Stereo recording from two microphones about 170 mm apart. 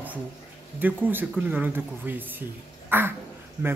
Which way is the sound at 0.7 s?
10° right (ahead or behind).